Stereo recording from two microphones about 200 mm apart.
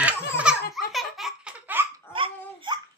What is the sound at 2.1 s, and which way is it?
Laughter, 25° right (ahead or behind).